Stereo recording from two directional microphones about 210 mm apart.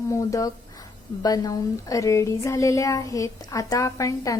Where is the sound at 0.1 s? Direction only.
15° left (ahead or behind).